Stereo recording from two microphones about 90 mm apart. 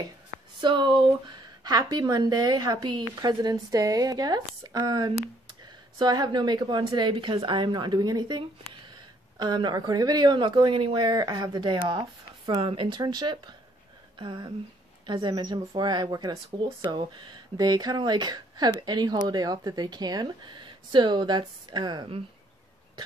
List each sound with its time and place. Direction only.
0.6 s a woman's voice: 60° right (ahead or behind)
12.6 s speech: 65° right (ahead or behind)
16.8 s a woman's voice: 60° right (ahead or behind)